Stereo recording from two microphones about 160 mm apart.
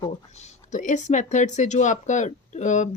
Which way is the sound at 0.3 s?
45° left (ahead or behind).